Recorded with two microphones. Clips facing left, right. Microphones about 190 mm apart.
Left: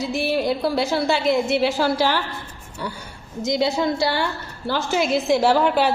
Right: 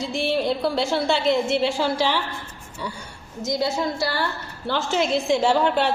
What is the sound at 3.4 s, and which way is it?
Speech, 25° left (ahead or behind).